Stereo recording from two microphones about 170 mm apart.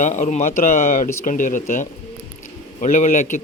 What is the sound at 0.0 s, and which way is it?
A man's voice, 45° left (ahead or behind).